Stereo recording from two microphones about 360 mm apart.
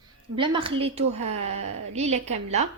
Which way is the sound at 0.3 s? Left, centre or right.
Centre.